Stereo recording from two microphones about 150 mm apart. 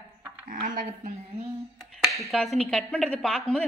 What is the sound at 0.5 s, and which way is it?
Speech, 65° right (ahead or behind).